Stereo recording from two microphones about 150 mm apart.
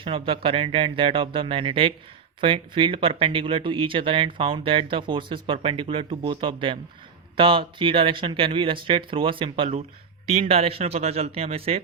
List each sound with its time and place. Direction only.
0.0 s speech: 35° right (ahead or behind)